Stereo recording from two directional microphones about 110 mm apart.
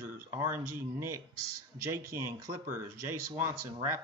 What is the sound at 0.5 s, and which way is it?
Speech, 25° right (ahead or behind).